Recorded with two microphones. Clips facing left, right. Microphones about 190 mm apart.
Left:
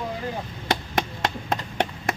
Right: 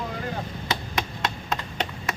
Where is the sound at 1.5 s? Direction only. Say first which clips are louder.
Left 4 dB; 55° left (ahead or behind).